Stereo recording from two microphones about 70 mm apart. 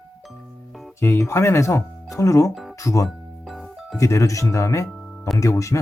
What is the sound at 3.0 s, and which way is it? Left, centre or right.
Music, centre.